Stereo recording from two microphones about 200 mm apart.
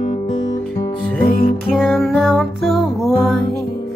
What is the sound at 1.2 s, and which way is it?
Music, 50° left (ahead or behind).